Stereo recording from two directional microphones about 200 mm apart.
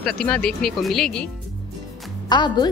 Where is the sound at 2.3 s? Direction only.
20° left (ahead or behind).